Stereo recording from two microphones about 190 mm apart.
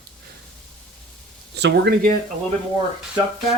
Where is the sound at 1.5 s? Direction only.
60° right (ahead or behind).